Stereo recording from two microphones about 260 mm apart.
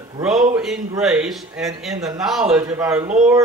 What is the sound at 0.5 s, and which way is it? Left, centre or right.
Speech, centre.